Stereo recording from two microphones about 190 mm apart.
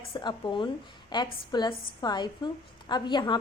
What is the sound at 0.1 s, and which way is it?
A woman's voice, 25° left (ahead or behind).